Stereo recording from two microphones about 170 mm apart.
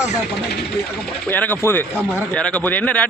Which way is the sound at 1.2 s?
10° left (ahead or behind).